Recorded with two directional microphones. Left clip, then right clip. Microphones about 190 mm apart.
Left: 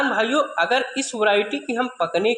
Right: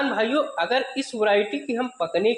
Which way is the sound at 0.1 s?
25° left (ahead or behind).